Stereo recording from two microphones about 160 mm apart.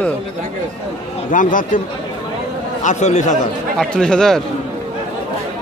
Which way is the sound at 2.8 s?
45° left (ahead or behind).